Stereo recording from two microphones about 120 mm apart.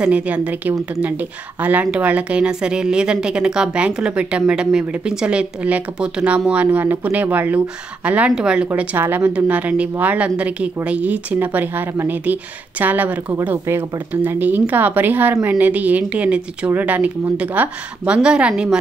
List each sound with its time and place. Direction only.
0.0 s a woman's voice: 10° right (ahead or behind)